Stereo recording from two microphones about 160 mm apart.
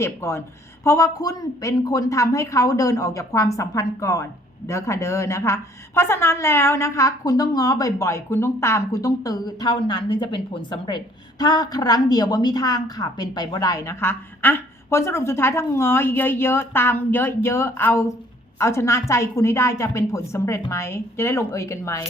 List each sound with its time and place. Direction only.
0.0 s a woman's voice: 15° left (ahead or behind)